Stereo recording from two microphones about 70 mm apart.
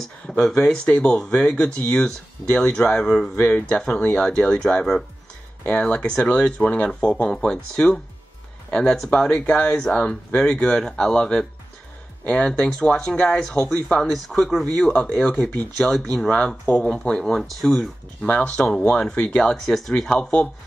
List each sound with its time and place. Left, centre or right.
0.3 s speech: centre
14.0 s speech: centre
14.9 s speech: left; by 17.8 s centre
18.2 s speech: centre
19.5 s speech: centre
19.9 s speech: centre